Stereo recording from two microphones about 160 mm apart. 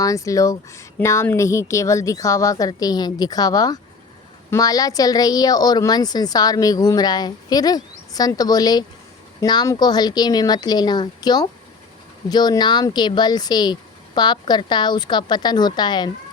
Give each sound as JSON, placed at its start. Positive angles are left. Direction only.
{"t": 0.0, "sound": "speech", "side_deg": 20}